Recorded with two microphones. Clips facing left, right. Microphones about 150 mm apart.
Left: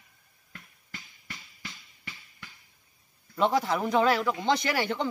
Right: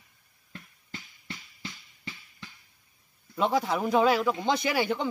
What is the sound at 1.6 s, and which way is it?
Music, 25° right (ahead or behind).